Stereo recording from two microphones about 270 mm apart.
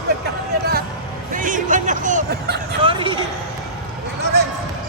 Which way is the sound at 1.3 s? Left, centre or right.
Right.